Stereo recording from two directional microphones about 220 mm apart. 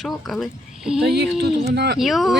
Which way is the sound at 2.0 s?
Centre (ahead or behind).